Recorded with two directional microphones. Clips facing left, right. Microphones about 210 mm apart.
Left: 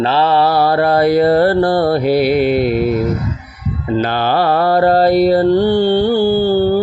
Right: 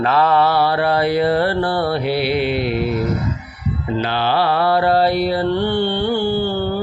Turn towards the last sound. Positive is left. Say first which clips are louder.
# left 7 dB
turn(degrees=40)  # may be behind; listen again after turning